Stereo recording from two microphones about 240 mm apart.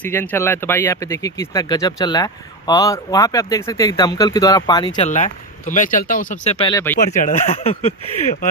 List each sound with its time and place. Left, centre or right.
0.0 s speech: centre
7.2 s speech: left